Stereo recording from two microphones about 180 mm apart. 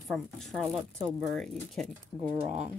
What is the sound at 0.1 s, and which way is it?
Speech, centre (ahead or behind).